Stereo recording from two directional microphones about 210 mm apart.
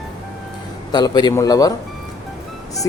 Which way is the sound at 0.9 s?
20° left (ahead or behind).